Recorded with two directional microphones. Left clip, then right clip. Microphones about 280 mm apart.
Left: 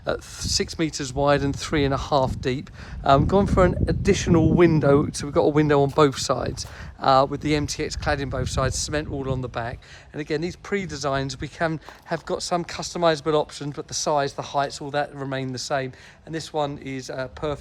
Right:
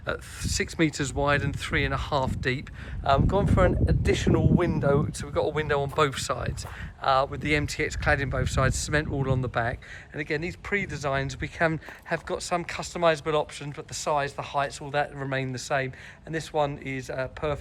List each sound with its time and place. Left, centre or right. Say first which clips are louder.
0.0 s speech: left 5 dB; centre
3.0 s speech: left 5 dB; left